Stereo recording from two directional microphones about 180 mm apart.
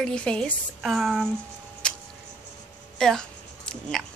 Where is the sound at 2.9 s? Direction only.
5° left (ahead or behind).